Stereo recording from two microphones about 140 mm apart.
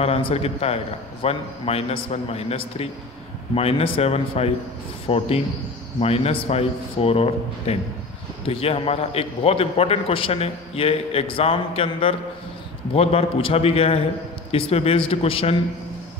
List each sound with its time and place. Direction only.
0.0 s a man's voice: 45° left (ahead or behind)